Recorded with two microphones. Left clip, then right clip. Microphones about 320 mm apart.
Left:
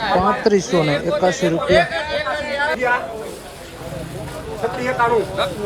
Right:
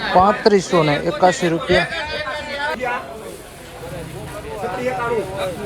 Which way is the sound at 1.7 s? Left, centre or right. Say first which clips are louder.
Left 4 dB; left.